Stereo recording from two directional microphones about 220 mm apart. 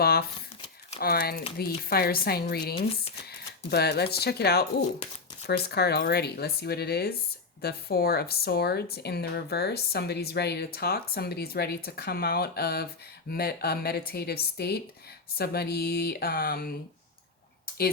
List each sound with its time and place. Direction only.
0.0 s speech: 45° left (ahead or behind)